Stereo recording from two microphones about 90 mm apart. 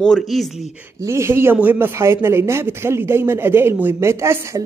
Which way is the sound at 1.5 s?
20° right (ahead or behind).